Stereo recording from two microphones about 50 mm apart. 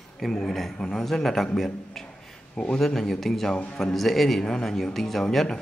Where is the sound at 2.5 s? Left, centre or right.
Left.